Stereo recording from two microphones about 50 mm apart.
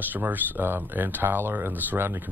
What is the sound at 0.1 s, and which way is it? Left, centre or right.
Speech, right.